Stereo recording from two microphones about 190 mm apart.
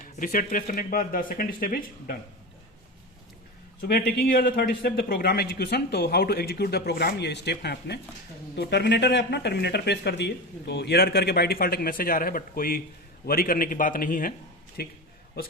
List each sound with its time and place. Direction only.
0.2 s speech: 45° left (ahead or behind)
3.8 s speech: 55° left (ahead or behind)